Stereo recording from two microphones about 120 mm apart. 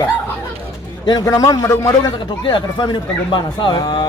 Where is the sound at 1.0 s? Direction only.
35° left (ahead or behind).